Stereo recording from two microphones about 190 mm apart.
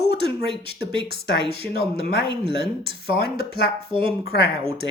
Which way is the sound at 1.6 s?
55° left (ahead or behind).